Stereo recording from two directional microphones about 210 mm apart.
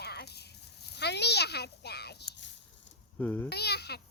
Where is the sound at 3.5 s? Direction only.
50° left (ahead or behind).